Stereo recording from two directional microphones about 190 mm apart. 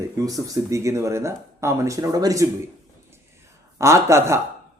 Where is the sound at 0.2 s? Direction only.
20° right (ahead or behind).